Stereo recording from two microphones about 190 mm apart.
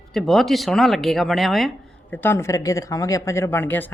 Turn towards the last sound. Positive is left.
turn(degrees=10)  # may be behind; listen again after turning